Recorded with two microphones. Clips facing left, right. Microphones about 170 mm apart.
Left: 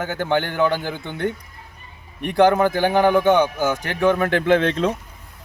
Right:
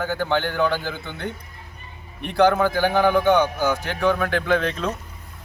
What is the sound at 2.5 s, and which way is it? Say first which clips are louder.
Speech: left 2 dB; 20° left (ahead or behind).